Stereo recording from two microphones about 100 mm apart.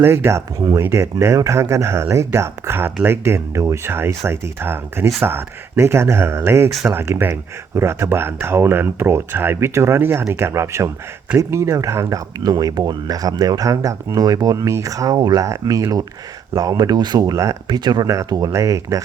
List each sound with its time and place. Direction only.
0.0 s speech: 25° right (ahead or behind); by 15.4 s 45° right (ahead or behind)
15.4 s speech: 35° right (ahead or behind)
17.7 s speech: 45° right (ahead or behind)